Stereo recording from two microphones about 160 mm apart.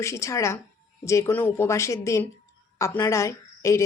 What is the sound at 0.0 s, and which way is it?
A woman's voice, 20° left (ahead or behind).